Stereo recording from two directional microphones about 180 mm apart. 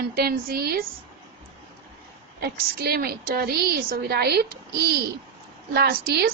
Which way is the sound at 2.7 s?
60° right (ahead or behind).